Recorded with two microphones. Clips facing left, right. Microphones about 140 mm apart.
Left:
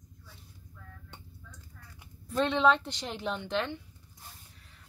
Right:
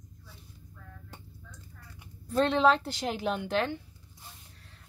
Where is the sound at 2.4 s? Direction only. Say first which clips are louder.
Right 1 dB; centre (ahead or behind).